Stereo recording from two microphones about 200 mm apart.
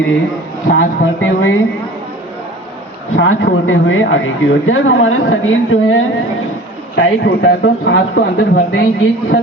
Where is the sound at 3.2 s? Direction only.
70° left (ahead or behind).